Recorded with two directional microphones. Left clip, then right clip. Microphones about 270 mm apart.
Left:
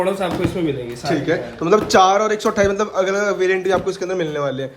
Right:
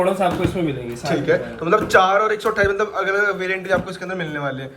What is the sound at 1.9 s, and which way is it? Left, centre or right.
Speech, left.